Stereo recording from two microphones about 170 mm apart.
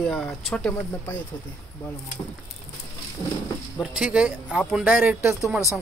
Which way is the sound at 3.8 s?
5° right (ahead or behind).